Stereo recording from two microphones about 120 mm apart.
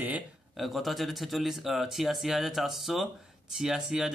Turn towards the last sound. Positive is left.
turn(degrees=-5)  # may be behind; listen again after turning